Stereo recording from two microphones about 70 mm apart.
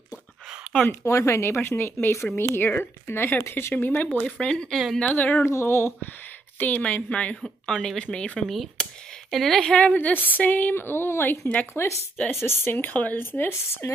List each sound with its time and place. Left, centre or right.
1.0 s speech: left
4.2 s speech: centre
5.1 s speech: left
5.4 s speech: left
6.6 s speech: left
7.4 s speech: centre
8.8 s a sound: centre
9.3 s speech: centre; by 13.9 s left